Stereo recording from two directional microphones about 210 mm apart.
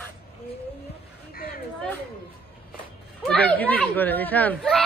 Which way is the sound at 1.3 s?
45° left (ahead or behind).